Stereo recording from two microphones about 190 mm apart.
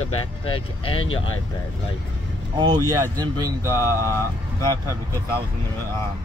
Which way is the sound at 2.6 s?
20° right (ahead or behind).